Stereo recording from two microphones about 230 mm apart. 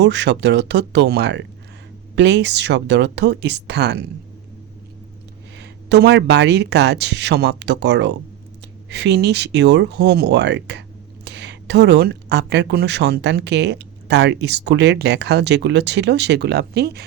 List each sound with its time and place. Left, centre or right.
0.0 s a woman's voice: right
5.5 s a woman's voice: right